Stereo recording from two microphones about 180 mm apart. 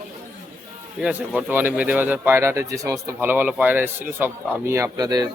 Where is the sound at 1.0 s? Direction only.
5° right (ahead or behind); by 5.3 s 20° right (ahead or behind).